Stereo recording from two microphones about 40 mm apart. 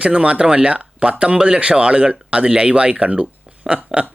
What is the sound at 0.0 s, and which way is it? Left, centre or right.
Speech, right.